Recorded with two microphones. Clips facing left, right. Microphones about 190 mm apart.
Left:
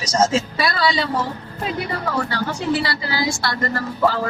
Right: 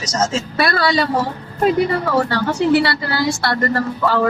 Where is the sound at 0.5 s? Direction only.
60° right (ahead or behind).